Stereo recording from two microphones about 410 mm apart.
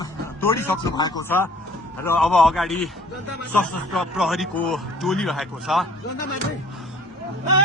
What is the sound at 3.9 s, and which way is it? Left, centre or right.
A man's voice, centre.